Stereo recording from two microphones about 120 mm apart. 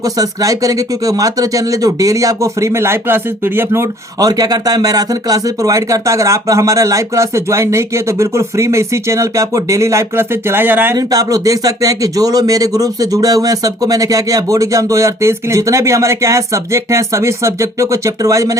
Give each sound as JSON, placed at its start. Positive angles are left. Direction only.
{"t": 0.0, "sound": "speech", "side_deg": -30}
{"t": 10.9, "sound": "speech", "side_deg": -30}